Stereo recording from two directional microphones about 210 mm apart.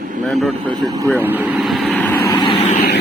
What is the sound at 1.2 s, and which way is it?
Vehicle, 10° right (ahead or behind).